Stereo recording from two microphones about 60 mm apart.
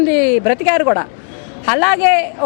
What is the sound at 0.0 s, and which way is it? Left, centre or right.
A woman's voice, centre.